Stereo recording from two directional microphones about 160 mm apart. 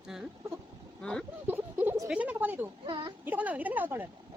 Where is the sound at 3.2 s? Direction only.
10° right (ahead or behind).